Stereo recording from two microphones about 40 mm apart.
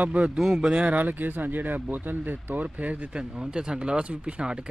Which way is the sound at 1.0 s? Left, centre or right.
Right.